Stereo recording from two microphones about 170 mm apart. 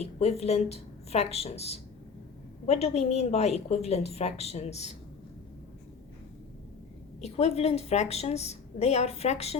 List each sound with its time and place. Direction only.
0.0 s a woman's voice: 40° left (ahead or behind)
7.2 s a woman's voice: 40° left (ahead or behind)